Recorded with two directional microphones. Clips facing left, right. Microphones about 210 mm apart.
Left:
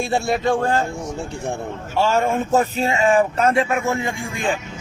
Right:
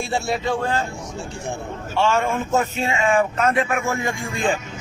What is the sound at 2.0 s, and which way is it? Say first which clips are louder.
Speech: left 2 dB; 40° left (ahead or behind).